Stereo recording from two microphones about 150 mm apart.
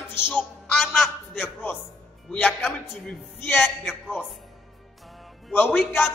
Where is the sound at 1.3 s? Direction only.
15° left (ahead or behind).